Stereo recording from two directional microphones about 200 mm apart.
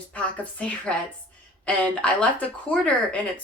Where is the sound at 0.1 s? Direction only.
5° left (ahead or behind).